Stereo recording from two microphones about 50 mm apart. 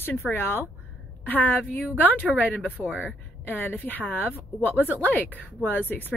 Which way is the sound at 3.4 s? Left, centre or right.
Left.